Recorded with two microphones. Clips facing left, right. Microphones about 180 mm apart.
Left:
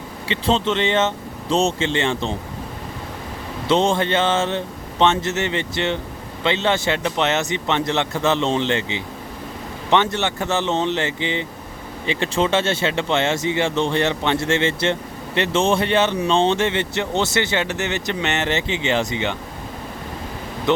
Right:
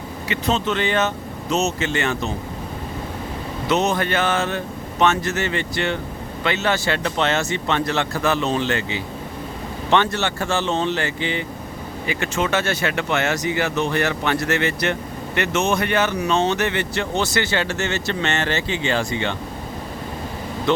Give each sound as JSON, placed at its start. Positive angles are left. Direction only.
{"t": 0.3, "sound": "speech", "side_deg": 30}
{"t": 3.7, "sound": "speech", "side_deg": 30}
{"t": 20.7, "sound": "speech", "side_deg": 20}